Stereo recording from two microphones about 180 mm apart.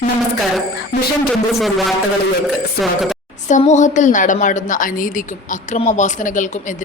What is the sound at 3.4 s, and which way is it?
A woman's voice, 40° left (ahead or behind).